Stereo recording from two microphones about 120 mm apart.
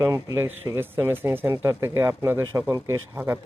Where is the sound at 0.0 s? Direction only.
25° right (ahead or behind).